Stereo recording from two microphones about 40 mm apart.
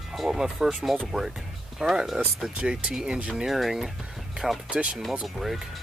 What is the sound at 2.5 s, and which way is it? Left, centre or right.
Speech, right.